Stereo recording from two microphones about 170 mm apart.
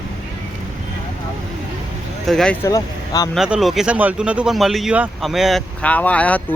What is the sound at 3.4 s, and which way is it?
Speech, centre (ahead or behind).